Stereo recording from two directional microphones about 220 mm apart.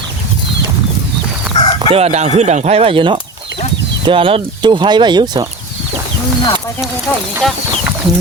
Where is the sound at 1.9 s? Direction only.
30° right (ahead or behind).